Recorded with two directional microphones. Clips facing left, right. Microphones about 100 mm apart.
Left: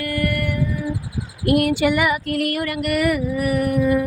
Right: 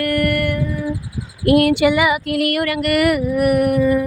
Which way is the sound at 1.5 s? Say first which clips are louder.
Right 4 dB; 90° right.